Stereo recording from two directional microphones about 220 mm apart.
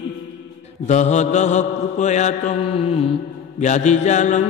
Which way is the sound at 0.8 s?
30° left (ahead or behind).